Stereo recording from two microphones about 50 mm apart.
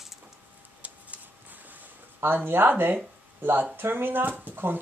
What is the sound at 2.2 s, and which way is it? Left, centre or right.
Speech, right.